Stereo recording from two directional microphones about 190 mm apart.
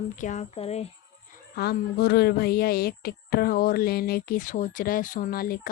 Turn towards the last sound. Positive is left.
turn(degrees=50)  # may be behind; listen again after turning